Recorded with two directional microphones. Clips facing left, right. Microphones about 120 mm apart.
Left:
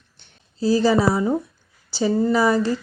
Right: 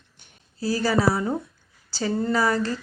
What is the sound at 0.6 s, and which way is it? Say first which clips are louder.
Speech: left 5 dB; 20° left (ahead or behind).